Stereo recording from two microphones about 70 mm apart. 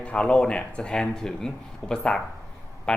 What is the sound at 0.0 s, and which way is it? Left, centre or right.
Speech, centre.